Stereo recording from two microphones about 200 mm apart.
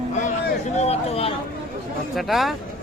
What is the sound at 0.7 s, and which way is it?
Speech, 30° left (ahead or behind).